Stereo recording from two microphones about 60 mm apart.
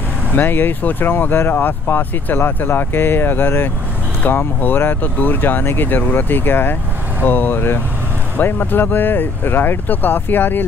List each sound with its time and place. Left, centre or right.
0.4 s speech: left